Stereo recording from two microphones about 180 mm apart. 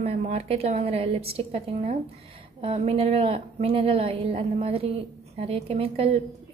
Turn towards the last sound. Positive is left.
turn(degrees=-30)  # may be behind; listen again after turning